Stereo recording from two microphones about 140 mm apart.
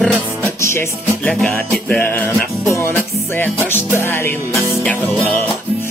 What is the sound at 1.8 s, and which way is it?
Music, 10° left (ahead or behind).